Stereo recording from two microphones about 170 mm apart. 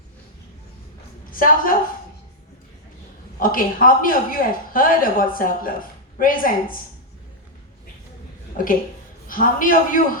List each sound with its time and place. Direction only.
1.3 s a woman's voice: 55° left (ahead or behind)
3.4 s speech: 55° left (ahead or behind)
8.6 s speech: 55° left (ahead or behind)